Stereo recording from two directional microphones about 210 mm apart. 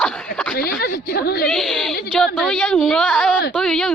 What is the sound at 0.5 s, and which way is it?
Speech, 45° left (ahead or behind).